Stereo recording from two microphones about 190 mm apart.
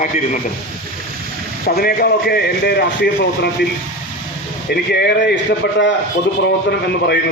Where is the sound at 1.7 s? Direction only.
55° left (ahead or behind).